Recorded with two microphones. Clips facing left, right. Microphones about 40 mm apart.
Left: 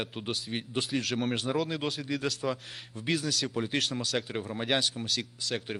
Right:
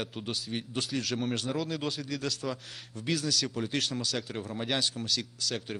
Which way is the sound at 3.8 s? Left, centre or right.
Centre.